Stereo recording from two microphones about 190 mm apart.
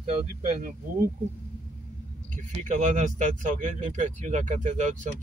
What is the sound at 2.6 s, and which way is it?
Speech, 40° right (ahead or behind).